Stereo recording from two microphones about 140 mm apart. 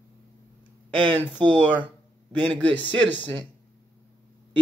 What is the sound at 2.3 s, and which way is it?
Speech, 10° left (ahead or behind).